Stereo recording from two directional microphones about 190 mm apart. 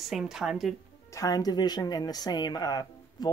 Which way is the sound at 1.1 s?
20° left (ahead or behind).